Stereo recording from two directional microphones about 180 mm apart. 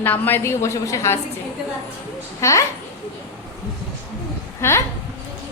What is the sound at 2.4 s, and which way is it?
Speech, 15° left (ahead or behind).